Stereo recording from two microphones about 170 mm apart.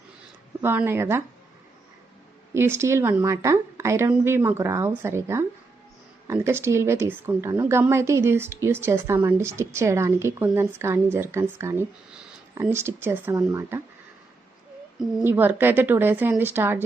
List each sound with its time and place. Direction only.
0.6 s speech: 15° right (ahead or behind)
2.5 s speech: 15° right (ahead or behind)
15.2 s speech: 10° right (ahead or behind)